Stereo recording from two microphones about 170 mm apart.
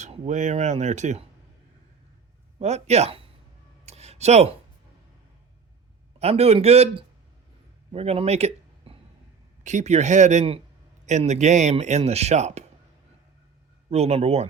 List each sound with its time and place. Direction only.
0.0 s speech: 45° right (ahead or behind)
2.6 s a man's voice: 40° right (ahead or behind)
3.8 s a sound: 40° right (ahead or behind)
6.1 s a man's voice: 40° right (ahead or behind)
13.9 s a man's voice: 40° right (ahead or behind)